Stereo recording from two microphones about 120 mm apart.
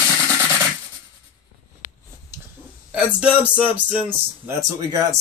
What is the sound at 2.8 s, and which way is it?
A man's voice, 10° right (ahead or behind).